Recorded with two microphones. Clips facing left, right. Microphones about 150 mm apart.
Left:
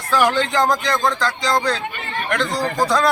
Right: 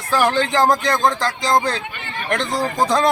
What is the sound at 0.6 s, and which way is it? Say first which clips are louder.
Speech: right 2 dB; 25° right (ahead or behind).